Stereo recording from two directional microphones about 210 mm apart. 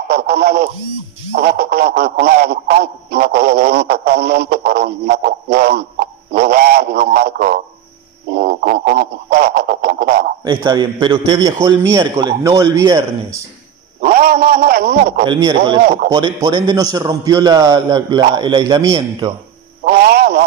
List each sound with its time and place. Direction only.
0.1 s speech: 50° right (ahead or behind)
10.4 s a man's voice: 20° right (ahead or behind)
14.0 s speech: 50° right (ahead or behind)
15.2 s a man's voice: 20° right (ahead or behind)
19.8 s a sound: 50° right (ahead or behind)